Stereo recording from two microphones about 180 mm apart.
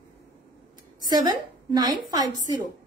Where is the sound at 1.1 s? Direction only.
25° right (ahead or behind).